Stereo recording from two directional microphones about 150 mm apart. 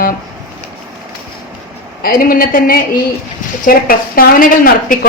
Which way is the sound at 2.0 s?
75° left (ahead or behind).